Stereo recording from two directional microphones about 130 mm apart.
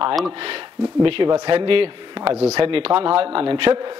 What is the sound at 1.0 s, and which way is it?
A man's voice, 40° right (ahead or behind).